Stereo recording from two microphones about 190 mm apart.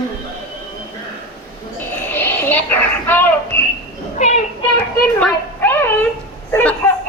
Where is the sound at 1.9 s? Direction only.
10° left (ahead or behind).